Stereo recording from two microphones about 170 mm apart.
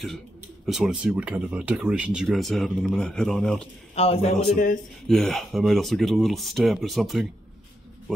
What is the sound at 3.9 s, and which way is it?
Speech, 35° left (ahead or behind).